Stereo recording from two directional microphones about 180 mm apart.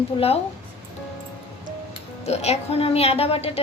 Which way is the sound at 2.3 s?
35° left (ahead or behind).